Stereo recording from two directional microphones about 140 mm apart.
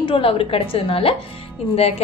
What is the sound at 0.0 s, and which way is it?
A woman's voice, 40° left (ahead or behind).